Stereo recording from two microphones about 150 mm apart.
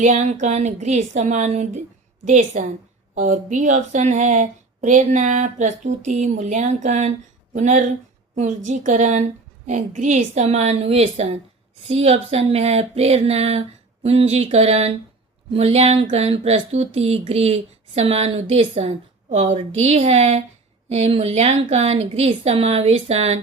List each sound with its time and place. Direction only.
0.0 s speech: 55° right (ahead or behind)